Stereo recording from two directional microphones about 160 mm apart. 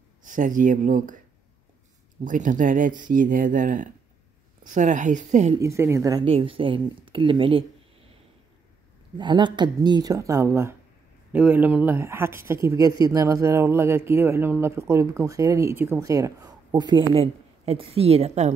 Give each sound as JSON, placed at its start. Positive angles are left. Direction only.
{"t": 0.2, "sound": "speech", "side_deg": -55}
{"t": 2.2, "sound": "a woman's voice", "side_deg": -55}
{"t": 5.6, "sound": "speech", "side_deg": -15}
{"t": 6.2, "sound": "speech", "side_deg": -35}
{"t": 9.2, "sound": "speech", "side_deg": -30}